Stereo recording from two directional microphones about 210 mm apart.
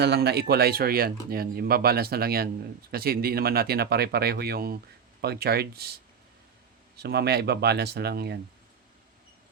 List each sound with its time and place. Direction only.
0.0 s speech: 50° right (ahead or behind)